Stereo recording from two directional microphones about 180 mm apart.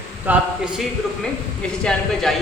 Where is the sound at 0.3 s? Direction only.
10° right (ahead or behind).